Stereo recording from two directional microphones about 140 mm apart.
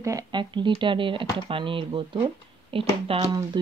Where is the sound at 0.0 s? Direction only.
30° right (ahead or behind).